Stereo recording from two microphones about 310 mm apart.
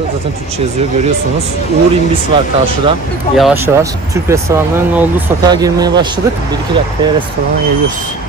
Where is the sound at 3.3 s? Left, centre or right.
Centre.